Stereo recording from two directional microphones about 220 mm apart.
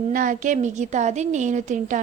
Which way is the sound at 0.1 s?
35° right (ahead or behind).